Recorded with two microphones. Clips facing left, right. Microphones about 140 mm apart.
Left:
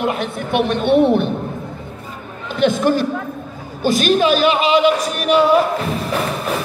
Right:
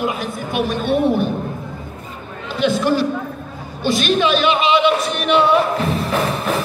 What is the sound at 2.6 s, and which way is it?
A man's voice, 50° left (ahead or behind).